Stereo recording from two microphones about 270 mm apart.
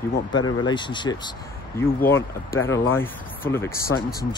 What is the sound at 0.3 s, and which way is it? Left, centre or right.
Speech, centre.